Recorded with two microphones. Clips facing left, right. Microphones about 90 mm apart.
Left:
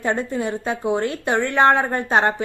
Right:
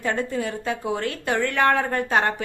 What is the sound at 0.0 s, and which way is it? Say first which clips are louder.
A woman's voice: left 2 dB; 25° left (ahead or behind).